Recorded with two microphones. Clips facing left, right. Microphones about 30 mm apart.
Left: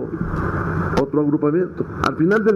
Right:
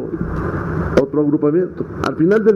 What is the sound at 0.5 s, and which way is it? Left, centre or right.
Vehicle, centre.